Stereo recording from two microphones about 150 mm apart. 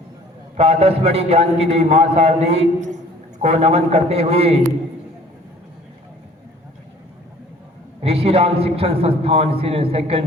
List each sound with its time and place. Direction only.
0.5 s a man's voice: 40° right (ahead or behind)
8.0 s a man's voice: 40° right (ahead or behind)